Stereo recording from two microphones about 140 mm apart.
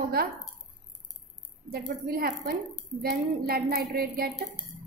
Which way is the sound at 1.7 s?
90° right.